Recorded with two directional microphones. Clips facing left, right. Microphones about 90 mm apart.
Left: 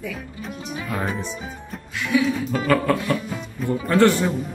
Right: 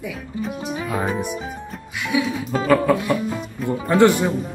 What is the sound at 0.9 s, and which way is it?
Speech, 10° right (ahead or behind).